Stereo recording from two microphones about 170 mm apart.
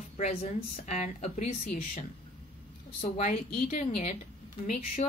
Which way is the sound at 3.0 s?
40° left (ahead or behind).